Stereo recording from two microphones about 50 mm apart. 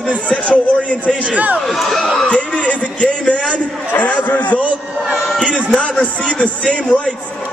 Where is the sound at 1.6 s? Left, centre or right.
Centre.